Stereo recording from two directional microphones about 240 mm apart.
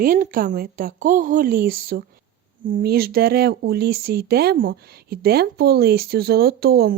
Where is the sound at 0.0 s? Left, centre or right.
Right.